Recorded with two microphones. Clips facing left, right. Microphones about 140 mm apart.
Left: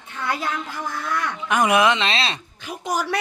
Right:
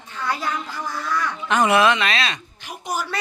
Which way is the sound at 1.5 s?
15° left (ahead or behind).